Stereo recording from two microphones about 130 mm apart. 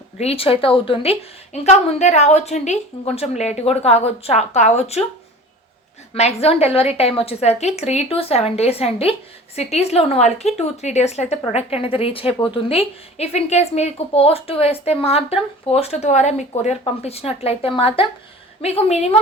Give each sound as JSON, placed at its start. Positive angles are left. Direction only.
{"t": 0.2, "sound": "a woman's voice", "side_deg": 50}
{"t": 1.5, "sound": "a woman's voice", "side_deg": 60}
{"t": 6.1, "sound": "a woman's voice", "side_deg": 55}
{"t": 16.8, "sound": "a woman's voice", "side_deg": 50}